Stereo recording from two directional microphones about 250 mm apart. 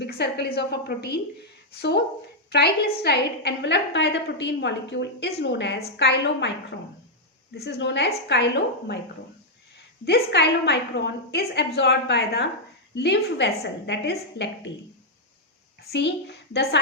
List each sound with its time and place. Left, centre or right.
0.0 s a woman's voice: left
7.5 s a woman's voice: left
10.1 s a woman's voice: left
15.8 s a woman's voice: left